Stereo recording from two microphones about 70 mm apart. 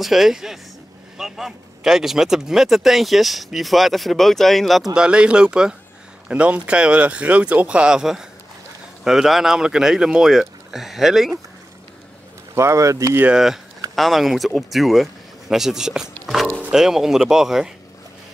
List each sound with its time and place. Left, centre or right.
0.0 s speech: centre
4.9 s speech: centre
12.5 s speech: right
13.3 s speech: centre